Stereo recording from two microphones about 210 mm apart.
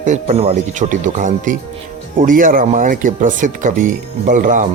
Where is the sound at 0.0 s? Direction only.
30° right (ahead or behind).